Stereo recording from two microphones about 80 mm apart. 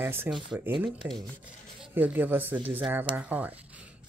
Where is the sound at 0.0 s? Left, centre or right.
Right.